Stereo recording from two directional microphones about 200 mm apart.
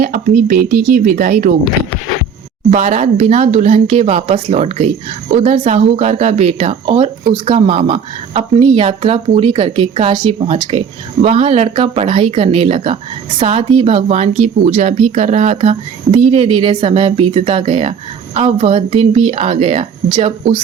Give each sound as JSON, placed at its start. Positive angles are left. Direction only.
{"t": 0.0, "sound": "speech", "side_deg": -40}
{"t": 2.6, "sound": "speech", "side_deg": -35}